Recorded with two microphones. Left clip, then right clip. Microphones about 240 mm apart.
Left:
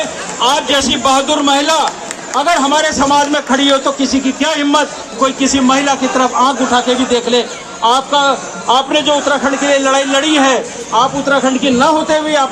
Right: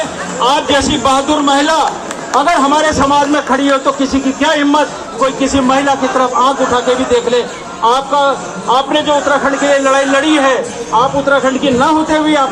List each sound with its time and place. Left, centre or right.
0.3 s a man's voice: left